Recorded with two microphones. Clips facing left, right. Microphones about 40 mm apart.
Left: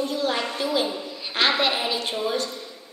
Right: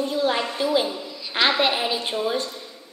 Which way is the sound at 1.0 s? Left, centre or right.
Left.